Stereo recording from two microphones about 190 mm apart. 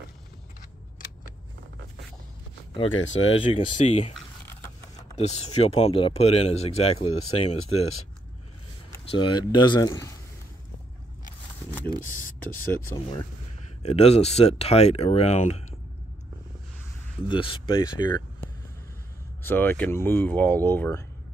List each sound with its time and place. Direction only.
2.9 s speech: 90° left
3.5 s speech: 35° left (ahead or behind)
4.5 s printer: 15° left (ahead or behind)
5.1 s speech: 35° left (ahead or behind)
9.1 s speech: 25° left (ahead or behind)
13.8 s speech: 35° left (ahead or behind)
17.3 s speech: 25° left (ahead or behind)
19.4 s speech: 10° left (ahead or behind)